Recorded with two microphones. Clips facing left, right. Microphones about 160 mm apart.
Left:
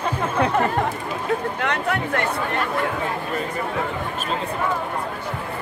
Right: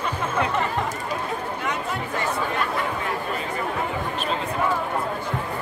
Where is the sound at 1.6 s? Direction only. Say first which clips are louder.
Left 4 dB; 70° left (ahead or behind).